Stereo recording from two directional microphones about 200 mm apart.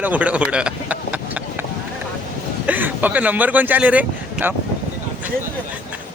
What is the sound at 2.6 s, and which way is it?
Speech, 10° right (ahead or behind).